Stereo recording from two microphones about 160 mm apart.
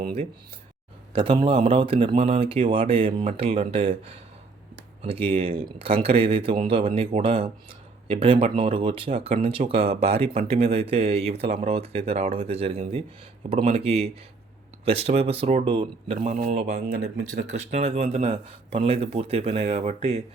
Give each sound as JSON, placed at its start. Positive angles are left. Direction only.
{"t": 1.1, "sound": "speech", "side_deg": -30}
{"t": 16.9, "sound": "speech", "side_deg": -90}
{"t": 17.4, "sound": "speech", "side_deg": -45}